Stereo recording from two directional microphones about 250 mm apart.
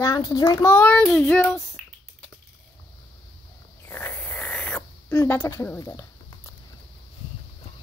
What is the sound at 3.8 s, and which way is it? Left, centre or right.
Snoring, centre.